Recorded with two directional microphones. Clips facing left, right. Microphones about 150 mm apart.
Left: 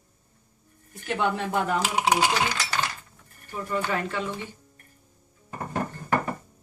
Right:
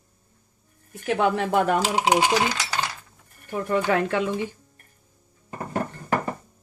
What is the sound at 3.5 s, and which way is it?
Speech, 70° right (ahead or behind).